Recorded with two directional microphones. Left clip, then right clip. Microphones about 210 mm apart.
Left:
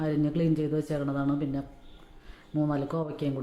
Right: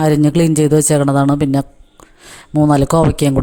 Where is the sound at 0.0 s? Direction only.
50° right (ahead or behind).